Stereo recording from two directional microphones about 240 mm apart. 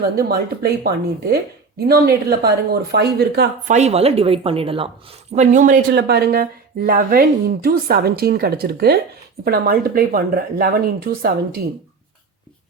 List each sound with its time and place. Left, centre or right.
0.0 s a woman's voice: right
3.8 s a woman's voice: right